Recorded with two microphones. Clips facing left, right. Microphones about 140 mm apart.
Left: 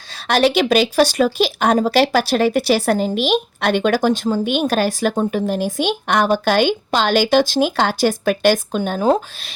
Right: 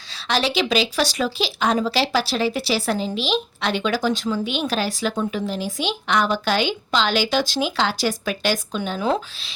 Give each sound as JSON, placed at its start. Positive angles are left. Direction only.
{"t": 0.1, "sound": "speech", "side_deg": 50}